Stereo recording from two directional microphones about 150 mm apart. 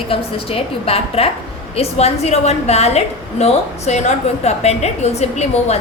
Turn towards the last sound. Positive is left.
turn(degrees=45)  # may be behind; listen again after turning